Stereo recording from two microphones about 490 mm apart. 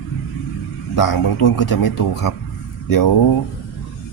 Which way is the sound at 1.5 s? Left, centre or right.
Left.